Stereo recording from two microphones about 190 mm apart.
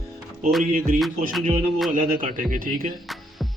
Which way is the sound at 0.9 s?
Centre (ahead or behind).